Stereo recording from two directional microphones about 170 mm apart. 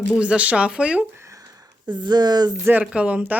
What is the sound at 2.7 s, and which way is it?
Speech, 10° right (ahead or behind).